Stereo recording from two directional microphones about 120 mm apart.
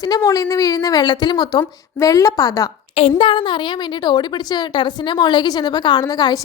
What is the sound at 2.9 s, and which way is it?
A woman's voice, 50° left (ahead or behind).